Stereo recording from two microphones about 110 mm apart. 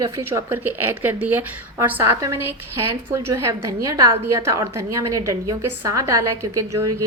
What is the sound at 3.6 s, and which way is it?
A woman's voice, 30° right (ahead or behind).